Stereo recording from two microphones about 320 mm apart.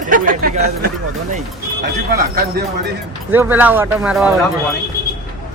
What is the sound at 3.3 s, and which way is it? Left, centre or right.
Speech, centre.